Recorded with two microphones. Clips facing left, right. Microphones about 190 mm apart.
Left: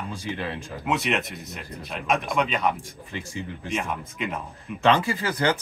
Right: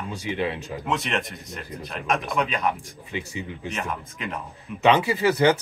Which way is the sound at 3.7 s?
Centre (ahead or behind).